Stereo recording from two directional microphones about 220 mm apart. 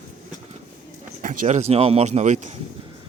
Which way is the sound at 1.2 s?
35° right (ahead or behind).